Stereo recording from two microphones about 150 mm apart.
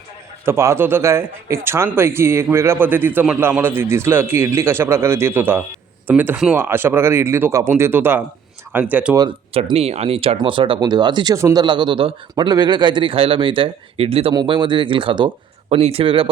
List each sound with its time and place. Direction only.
0.4 s a man's voice: 20° right (ahead or behind)
9.1 s speech: 30° right (ahead or behind)
9.6 s speech: 40° right (ahead or behind)